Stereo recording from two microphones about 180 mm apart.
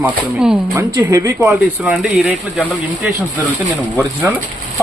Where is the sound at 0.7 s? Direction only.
20° right (ahead or behind).